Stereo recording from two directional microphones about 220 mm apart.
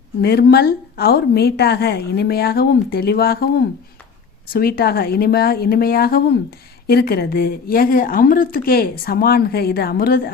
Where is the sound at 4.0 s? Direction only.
5° left (ahead or behind).